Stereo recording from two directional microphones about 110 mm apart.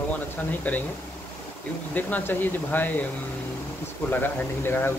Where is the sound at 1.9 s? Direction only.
15° left (ahead or behind).